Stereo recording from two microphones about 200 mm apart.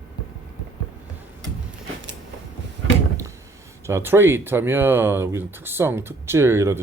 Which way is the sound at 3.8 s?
10° right (ahead or behind).